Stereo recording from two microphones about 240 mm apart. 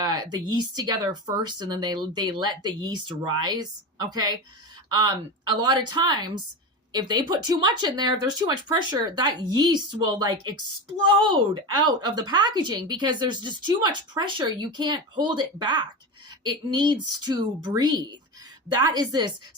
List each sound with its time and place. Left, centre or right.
0.0 s speech: centre